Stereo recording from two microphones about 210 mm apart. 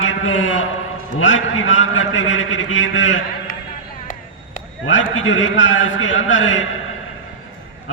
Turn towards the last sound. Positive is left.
turn(degrees=65)  # may be behind; listen again after turning